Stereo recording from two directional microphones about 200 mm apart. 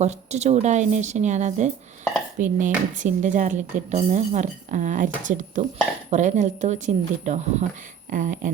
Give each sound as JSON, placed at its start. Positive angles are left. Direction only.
{"t": 0.0, "sound": "speech", "side_deg": -35}